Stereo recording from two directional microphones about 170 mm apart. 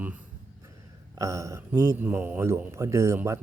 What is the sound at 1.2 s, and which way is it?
A man's voice, 20° right (ahead or behind).